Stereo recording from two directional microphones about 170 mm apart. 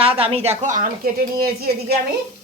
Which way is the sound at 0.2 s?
40° right (ahead or behind).